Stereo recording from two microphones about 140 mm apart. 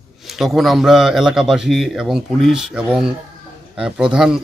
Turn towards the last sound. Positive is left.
turn(degrees=-5)  # may be behind; listen again after turning